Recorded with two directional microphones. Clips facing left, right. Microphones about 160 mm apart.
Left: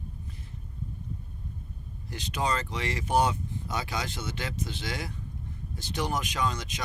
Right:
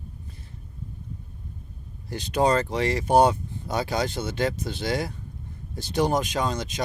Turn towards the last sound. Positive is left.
turn(degrees=-35)  # may be behind; listen again after turning